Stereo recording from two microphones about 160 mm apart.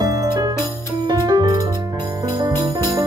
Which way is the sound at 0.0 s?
25° right (ahead or behind).